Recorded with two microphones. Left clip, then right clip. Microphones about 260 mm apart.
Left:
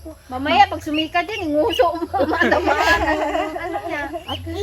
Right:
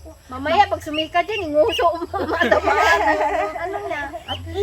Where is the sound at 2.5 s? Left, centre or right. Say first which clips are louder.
Right 4 dB; centre.